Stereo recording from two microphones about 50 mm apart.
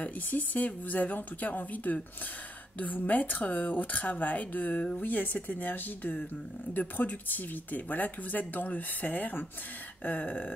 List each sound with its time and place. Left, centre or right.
0.0 s speech: left